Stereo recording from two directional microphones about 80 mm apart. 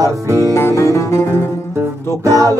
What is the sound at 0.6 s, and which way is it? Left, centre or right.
Music, left.